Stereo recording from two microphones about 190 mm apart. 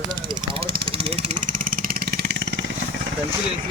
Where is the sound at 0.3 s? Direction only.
25° right (ahead or behind); by 2.6 s 65° right (ahead or behind).